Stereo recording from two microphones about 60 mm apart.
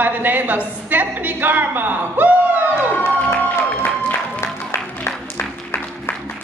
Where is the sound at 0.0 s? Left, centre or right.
Right.